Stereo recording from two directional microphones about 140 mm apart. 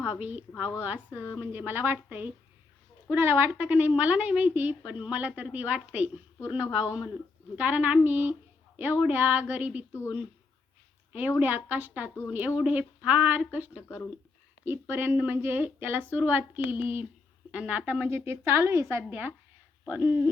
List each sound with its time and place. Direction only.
0.2 s a woman's voice: 10° right (ahead or behind)
11.1 s a woman's voice: 10° right (ahead or behind)
13.8 s speech: 15° left (ahead or behind)
14.6 s a woman's voice: 15° right (ahead or behind)